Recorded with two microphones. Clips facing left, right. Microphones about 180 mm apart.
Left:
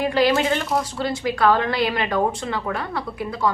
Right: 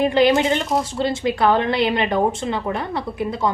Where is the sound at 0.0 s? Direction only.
25° right (ahead or behind).